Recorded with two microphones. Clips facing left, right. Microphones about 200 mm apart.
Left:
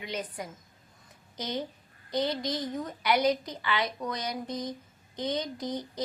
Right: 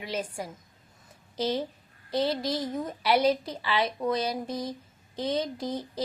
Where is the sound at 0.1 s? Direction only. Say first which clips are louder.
Right 4 dB; 30° right (ahead or behind).